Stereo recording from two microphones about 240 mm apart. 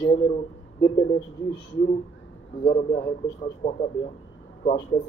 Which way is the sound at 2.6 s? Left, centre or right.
Left.